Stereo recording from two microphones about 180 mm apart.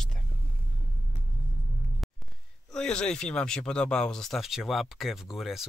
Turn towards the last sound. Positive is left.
turn(degrees=0)  # may be behind; listen again after turning